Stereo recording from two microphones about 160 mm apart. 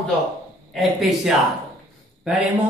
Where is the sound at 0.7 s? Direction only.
Centre (ahead or behind).